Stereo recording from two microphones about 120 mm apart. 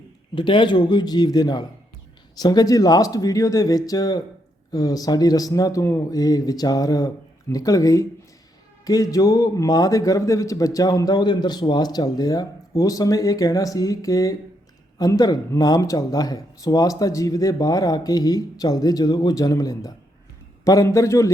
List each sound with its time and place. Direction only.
0.3 s a man's voice: 45° left (ahead or behind); by 21.2 s 25° left (ahead or behind)